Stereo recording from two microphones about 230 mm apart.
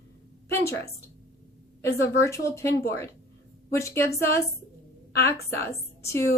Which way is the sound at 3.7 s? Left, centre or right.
Centre.